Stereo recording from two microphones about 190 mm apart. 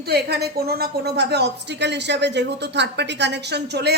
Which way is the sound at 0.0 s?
60° right (ahead or behind).